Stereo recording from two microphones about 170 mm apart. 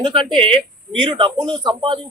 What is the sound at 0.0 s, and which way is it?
A man's voice, 25° right (ahead or behind).